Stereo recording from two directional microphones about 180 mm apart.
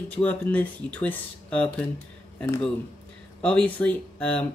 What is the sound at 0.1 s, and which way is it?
Speech, 10° left (ahead or behind).